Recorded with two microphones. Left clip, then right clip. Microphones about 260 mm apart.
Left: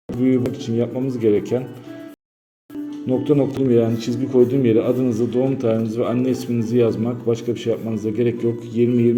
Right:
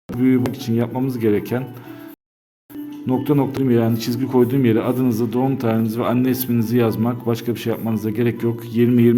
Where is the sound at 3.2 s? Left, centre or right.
Right.